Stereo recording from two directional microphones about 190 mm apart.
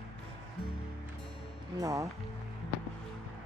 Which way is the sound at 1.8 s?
15° right (ahead or behind).